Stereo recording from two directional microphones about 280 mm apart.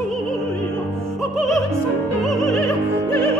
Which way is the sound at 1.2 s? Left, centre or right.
Centre.